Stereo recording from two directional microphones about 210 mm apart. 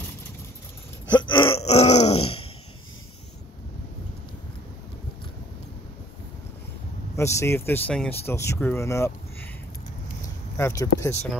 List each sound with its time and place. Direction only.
1.2 s groan: 25° left (ahead or behind)
7.2 s speech: 15° left (ahead or behind)
10.6 s speech: 15° left (ahead or behind)